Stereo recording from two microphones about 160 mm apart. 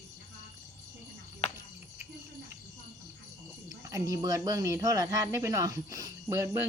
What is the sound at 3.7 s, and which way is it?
Speech, 20° right (ahead or behind).